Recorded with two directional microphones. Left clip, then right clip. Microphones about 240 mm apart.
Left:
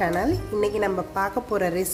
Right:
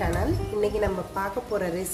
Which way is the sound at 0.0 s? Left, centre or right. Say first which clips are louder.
Left 4 dB; left.